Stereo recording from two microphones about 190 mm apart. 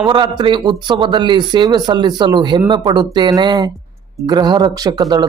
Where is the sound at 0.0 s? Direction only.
25° right (ahead or behind).